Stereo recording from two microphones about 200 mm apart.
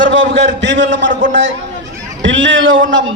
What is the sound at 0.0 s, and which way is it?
A man's voice, 65° right (ahead or behind).